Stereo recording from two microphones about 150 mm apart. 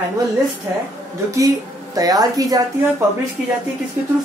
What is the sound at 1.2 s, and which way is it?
Speech, 20° right (ahead or behind).